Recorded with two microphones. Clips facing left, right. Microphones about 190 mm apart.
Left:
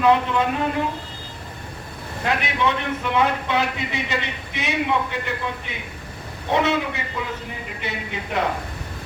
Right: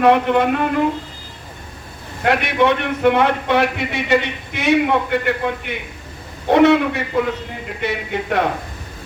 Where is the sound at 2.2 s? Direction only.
65° right (ahead or behind).